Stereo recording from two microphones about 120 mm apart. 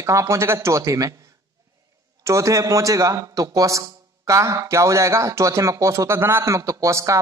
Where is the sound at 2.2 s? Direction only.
25° right (ahead or behind).